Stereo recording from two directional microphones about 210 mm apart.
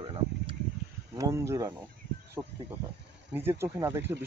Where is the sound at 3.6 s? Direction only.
10° right (ahead or behind).